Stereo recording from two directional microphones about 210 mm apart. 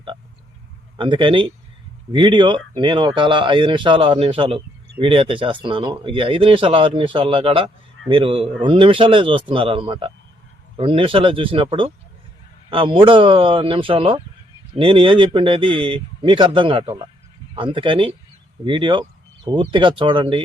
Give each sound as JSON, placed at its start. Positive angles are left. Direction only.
{"t": 0.9, "sound": "a man's voice", "side_deg": -25}